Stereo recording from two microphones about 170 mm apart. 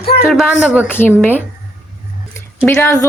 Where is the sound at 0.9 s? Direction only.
10° left (ahead or behind).